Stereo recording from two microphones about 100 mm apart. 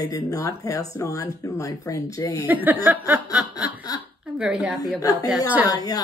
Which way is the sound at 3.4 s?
40° left (ahead or behind).